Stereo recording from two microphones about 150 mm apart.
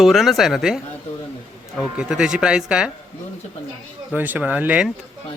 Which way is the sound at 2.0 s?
5° right (ahead or behind).